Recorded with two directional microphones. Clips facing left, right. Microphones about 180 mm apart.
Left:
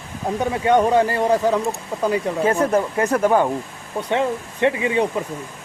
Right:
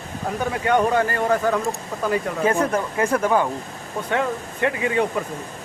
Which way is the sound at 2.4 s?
35° left (ahead or behind).